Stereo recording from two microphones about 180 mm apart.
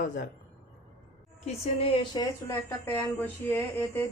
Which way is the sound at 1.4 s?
30° left (ahead or behind).